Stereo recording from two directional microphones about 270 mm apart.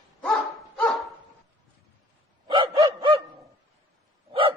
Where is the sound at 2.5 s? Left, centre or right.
Centre.